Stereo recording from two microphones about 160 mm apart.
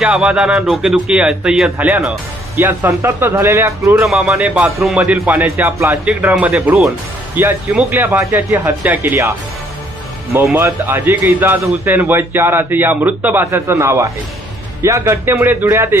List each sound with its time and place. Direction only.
0.0 s a man's voice: 5° right (ahead or behind)
4.1 s a man's voice: 5° right (ahead or behind)
10.4 s a man's voice: 10° right (ahead or behind)